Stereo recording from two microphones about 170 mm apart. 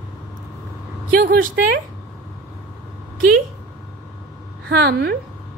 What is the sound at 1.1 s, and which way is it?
Speech, 60° right (ahead or behind).